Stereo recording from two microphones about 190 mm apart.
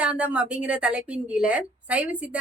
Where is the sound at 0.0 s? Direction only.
5° right (ahead or behind).